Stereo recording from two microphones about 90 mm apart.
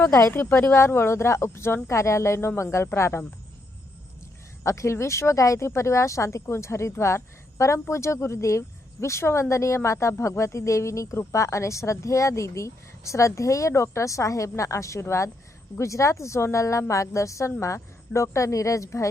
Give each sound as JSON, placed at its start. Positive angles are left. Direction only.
{"t": 0.1, "sound": "speech", "side_deg": 35}
{"t": 0.3, "sound": "speech", "side_deg": 25}
{"t": 4.6, "sound": "speech", "side_deg": 35}